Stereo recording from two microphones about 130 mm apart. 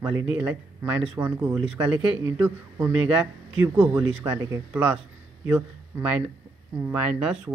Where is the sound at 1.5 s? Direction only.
5° right (ahead or behind).